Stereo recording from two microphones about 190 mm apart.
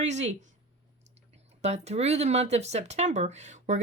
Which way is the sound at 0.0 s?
35° right (ahead or behind).